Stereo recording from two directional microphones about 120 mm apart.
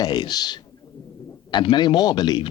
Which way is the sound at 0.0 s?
35° left (ahead or behind).